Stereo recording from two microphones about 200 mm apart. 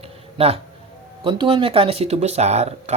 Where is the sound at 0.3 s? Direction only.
30° right (ahead or behind).